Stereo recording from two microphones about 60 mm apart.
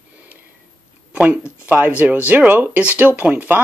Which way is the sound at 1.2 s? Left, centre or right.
Right.